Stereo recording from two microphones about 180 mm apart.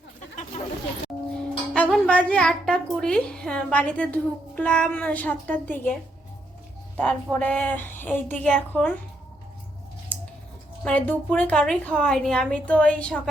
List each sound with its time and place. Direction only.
1.3 s speech: 5° left (ahead or behind)
10.8 s a woman's voice: 10° left (ahead or behind)